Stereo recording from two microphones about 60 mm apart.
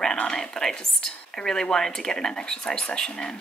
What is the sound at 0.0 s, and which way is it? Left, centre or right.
Speech, centre.